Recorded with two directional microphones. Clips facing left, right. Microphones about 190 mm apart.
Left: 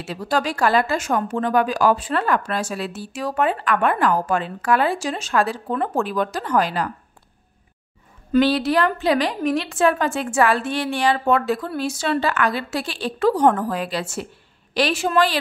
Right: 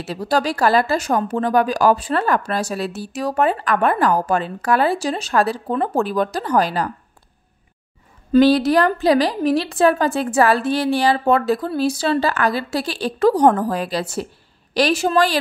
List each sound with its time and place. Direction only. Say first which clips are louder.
0.0 s a woman's voice: right 3 dB; 40° right (ahead or behind)
8.3 s a woman's voice: right 4 dB; 40° right (ahead or behind)